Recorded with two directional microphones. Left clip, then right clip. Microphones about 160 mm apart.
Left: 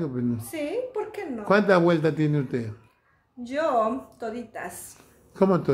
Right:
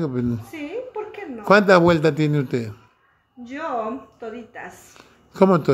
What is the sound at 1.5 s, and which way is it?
Speech, 40° right (ahead or behind).